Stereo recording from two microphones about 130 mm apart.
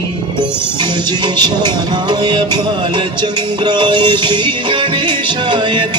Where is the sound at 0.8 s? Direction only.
35° right (ahead or behind).